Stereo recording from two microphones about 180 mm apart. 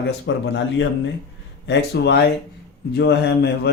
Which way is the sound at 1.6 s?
70° left (ahead or behind).